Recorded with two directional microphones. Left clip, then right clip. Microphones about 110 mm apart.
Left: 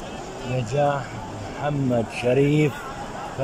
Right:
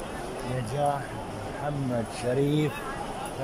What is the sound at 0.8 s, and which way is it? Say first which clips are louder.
Speech: left 5 dB; 15° left (ahead or behind).